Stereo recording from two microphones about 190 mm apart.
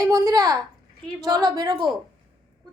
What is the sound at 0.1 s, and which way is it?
A woman's voice, 20° right (ahead or behind).